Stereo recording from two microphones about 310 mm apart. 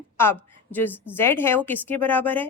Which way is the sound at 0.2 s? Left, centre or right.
Centre.